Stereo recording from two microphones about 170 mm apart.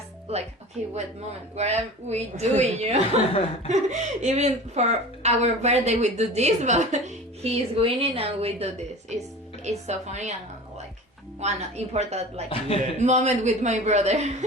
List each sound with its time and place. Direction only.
0.3 s a woman's voice: 35° right (ahead or behind)
1.5 s a woman's voice: 40° right (ahead or behind)
11.4 s a woman's voice: 40° right (ahead or behind)
12.5 s a man's voice: 35° left (ahead or behind)
13.0 s a man's voice: 45° right (ahead or behind)